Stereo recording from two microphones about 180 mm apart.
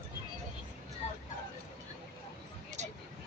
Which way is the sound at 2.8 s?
40° right (ahead or behind).